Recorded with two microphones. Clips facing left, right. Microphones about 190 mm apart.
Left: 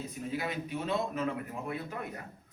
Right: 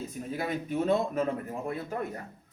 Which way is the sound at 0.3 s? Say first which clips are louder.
Right 5 dB; 45° right (ahead or behind).